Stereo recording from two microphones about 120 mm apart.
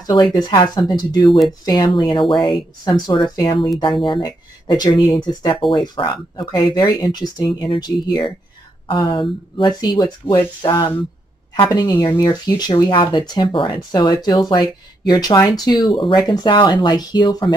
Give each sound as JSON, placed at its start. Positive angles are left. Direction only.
{"t": 0.0, "sound": "speech", "side_deg": 35}